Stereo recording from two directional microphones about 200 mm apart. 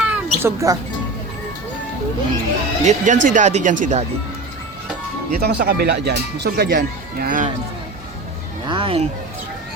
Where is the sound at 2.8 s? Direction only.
40° right (ahead or behind).